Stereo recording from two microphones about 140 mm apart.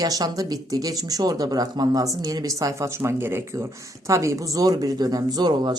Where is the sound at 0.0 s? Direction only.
25° right (ahead or behind).